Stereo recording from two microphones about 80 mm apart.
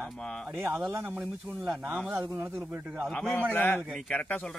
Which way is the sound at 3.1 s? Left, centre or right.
Centre.